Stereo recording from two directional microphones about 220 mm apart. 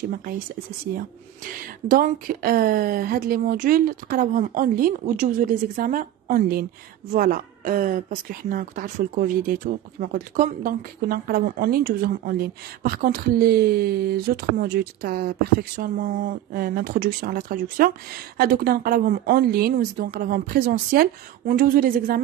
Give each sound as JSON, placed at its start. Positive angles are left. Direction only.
{"t": 0.9, "sound": "speech", "side_deg": -40}